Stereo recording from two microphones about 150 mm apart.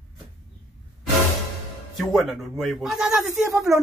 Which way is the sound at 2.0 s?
Centre (ahead or behind).